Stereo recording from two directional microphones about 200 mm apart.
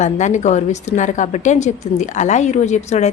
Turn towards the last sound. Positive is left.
turn(degrees=35)  # may be behind; listen again after turning